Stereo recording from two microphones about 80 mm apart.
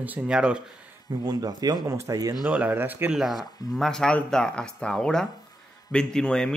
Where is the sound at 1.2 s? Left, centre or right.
Right.